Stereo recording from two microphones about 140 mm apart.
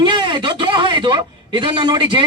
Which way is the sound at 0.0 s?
35° right (ahead or behind).